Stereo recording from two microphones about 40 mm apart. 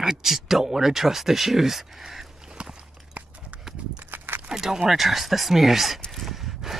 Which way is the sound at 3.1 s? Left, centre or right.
Right.